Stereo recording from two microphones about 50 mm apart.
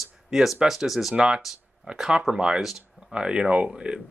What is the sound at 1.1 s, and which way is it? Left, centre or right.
Speech, centre.